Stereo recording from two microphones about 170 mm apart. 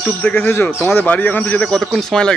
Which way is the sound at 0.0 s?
15° left (ahead or behind).